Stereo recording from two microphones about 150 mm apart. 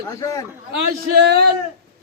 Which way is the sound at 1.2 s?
90° right.